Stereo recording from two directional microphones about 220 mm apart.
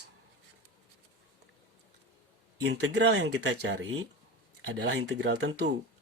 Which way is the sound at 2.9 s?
50° right (ahead or behind).